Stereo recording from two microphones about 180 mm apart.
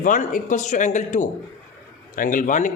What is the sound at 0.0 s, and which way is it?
Speech, 45° left (ahead or behind).